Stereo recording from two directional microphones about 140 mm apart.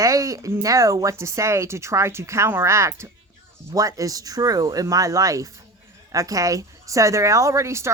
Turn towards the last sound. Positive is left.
turn(degrees=-20)  # may be behind; listen again after turning